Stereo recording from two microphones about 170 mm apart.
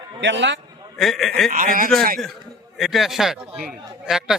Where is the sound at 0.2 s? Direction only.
90° right.